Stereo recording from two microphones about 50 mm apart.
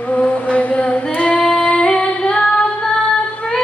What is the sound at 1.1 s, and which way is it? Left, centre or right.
Female singing, left.